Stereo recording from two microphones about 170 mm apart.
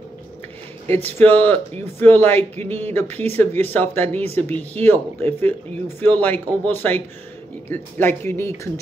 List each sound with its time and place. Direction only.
0.8 s speech: 10° left (ahead or behind)
2.6 s a sound: 35° right (ahead or behind)
3.3 s speech: 10° left (ahead or behind)